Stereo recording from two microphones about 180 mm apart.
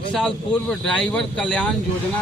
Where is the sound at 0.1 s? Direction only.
5° left (ahead or behind).